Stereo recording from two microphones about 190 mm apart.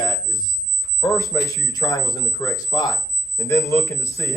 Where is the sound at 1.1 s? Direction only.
15° left (ahead or behind).